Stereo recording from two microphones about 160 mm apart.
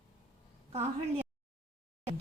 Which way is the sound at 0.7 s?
40° right (ahead or behind).